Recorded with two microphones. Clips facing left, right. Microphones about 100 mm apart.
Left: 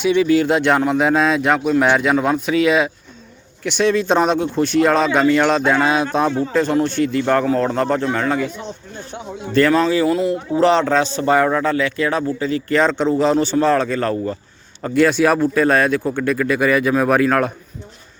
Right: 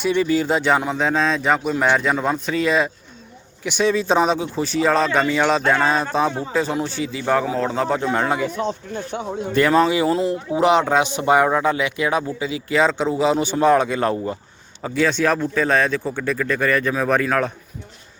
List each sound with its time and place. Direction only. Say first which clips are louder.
0.0 s speech: left 4 dB; centre (ahead or behind)
8.1 s speech: left 1 dB; 20° right (ahead or behind)
9.6 s a man's voice: left 2 dB; 15° right (ahead or behind)
10.5 s a man's voice: left 1 dB; 10° right (ahead or behind)
14.8 s a man's voice: left 6 dB; 5° right (ahead or behind)
15.0 s speech: left 4 dB; 10° left (ahead or behind)
16.6 s speech: left 5 dB; 15° left (ahead or behind)